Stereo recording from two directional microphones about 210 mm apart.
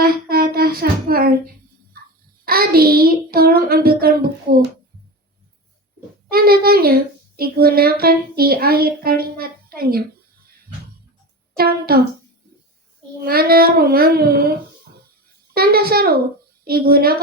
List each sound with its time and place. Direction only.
0.0 s a sound: 45° right (ahead or behind)
2.4 s a child's voice: 45° right (ahead or behind)
6.3 s a child's voice: 45° right (ahead or behind)
11.5 s a child's voice: 45° right (ahead or behind)
13.2 s a child's voice: 45° right (ahead or behind)
15.5 s a child's voice: 45° right (ahead or behind)